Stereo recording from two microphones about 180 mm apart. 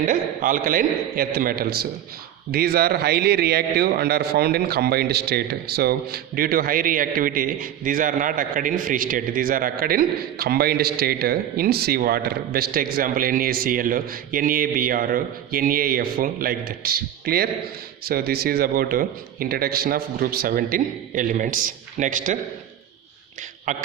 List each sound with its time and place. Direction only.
0.0 s a man's voice: 50° right (ahead or behind)
23.7 s a man's voice: 45° right (ahead or behind)